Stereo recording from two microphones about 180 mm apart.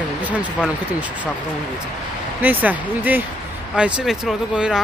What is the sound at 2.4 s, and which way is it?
Speech, 10° right (ahead or behind).